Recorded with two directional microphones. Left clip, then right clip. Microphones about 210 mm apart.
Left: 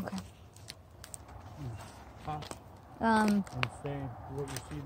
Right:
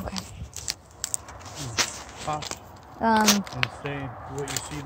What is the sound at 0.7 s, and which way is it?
Keys jangling, 10° left (ahead or behind).